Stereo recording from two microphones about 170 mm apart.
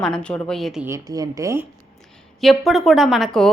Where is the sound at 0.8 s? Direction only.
20° right (ahead or behind).